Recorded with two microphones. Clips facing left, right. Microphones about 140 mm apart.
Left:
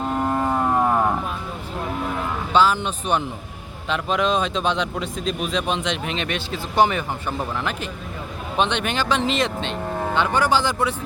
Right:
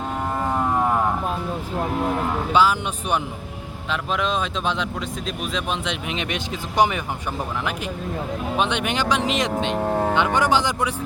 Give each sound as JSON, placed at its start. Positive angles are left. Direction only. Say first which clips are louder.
{"t": 0.3, "sound": "a sound", "louder": "right 1 dB", "side_deg": 5}
{"t": 2.5, "sound": "speech", "louder": "left 2 dB", "side_deg": -10}
{"t": 8.5, "sound": "speech", "louder": "left 2 dB", "side_deg": -10}
{"t": 9.7, "sound": "vehicle", "louder": "right 4 dB", "side_deg": -45}
{"t": 10.2, "sound": "speech", "louder": "left 3 dB", "side_deg": -20}